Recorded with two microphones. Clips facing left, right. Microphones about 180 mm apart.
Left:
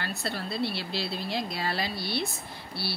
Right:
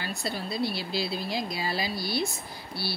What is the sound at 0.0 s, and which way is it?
Speech, centre (ahead or behind).